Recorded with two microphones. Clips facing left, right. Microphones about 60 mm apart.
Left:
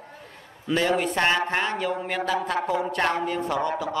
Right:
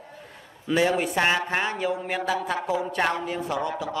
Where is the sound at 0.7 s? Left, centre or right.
Centre.